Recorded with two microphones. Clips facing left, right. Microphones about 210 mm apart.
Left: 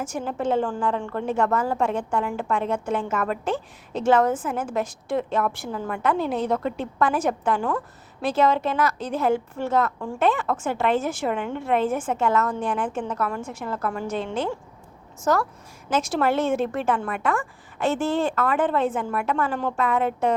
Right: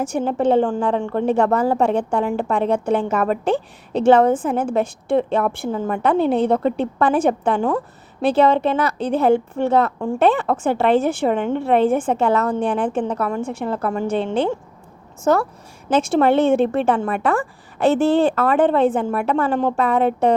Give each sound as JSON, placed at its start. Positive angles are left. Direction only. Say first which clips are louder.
{"t": 0.3, "sound": "a woman's voice", "louder": "right 7 dB", "side_deg": -30}